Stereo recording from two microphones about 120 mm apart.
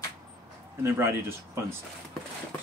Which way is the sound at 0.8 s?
20° right (ahead or behind).